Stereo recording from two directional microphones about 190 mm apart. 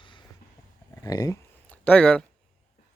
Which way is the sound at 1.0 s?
15° left (ahead or behind).